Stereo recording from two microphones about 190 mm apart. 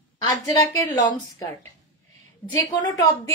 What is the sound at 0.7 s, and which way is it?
Speech, 15° left (ahead or behind).